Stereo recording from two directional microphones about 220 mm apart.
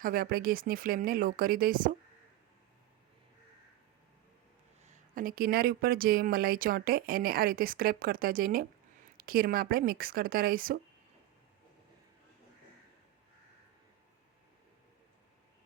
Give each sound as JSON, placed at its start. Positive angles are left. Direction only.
{"t": 0.0, "sound": "speech", "side_deg": -40}
{"t": 4.8, "sound": "speech", "side_deg": -35}